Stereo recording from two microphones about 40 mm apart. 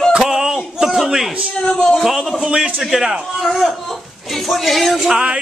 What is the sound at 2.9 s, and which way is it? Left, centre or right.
Speech, centre.